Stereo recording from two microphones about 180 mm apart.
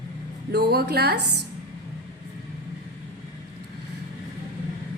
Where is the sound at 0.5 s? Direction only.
60° right (ahead or behind).